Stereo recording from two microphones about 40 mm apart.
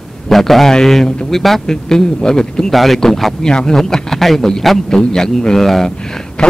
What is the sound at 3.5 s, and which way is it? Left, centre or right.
A man's voice, centre.